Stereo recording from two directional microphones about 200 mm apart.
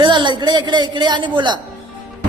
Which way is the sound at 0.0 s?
25° right (ahead or behind).